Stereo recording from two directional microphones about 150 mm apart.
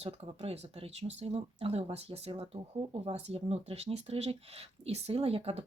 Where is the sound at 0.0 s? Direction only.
40° right (ahead or behind).